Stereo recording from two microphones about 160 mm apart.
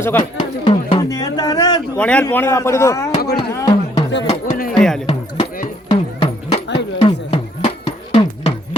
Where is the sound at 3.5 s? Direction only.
20° left (ahead or behind).